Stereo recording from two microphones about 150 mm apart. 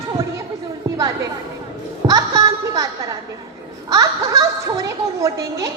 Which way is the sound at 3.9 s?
25° right (ahead or behind).